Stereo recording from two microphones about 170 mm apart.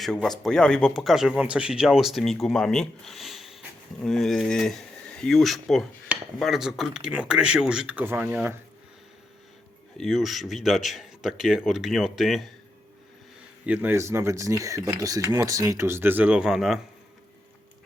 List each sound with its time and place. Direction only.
0.0 s speech: 5° left (ahead or behind)
10.0 s speech: centre (ahead or behind)
13.7 s speech: 15° right (ahead or behind)